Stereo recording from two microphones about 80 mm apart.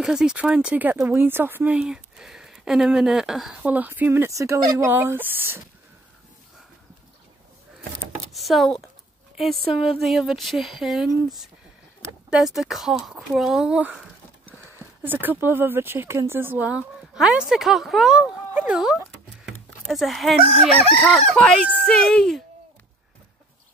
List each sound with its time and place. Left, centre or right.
0.0 s speech: centre; by 1.8 s right
1.8 s speech: centre
3.6 s speech: right
4.3 s speech: right
4.9 s speech: right
8.3 s speech: centre
14.7 s speech: right
16.6 s speech: centre
19.4 s crowing: centre
21.7 s speech: centre